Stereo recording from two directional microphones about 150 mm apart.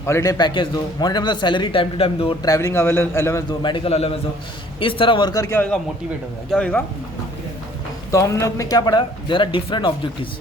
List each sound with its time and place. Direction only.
0.0 s a man's voice: 20° left (ahead or behind); by 2.3 s 40° left (ahead or behind)
2.4 s a man's voice: 20° left (ahead or behind)
3.6 s speech: 30° left (ahead or behind)
6.5 s a man's voice: 10° left (ahead or behind)
8.1 s a man's voice: 20° left (ahead or behind)